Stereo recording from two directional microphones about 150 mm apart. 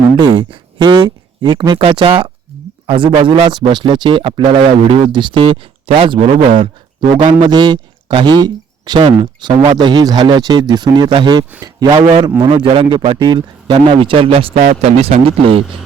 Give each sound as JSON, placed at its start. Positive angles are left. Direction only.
{"t": 0.2, "sound": "speech", "side_deg": -30}
{"t": 14.6, "sound": "a man's voice", "side_deg": -50}